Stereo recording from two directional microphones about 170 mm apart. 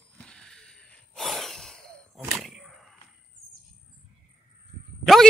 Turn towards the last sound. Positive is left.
turn(degrees=0)  # may be behind; listen again after turning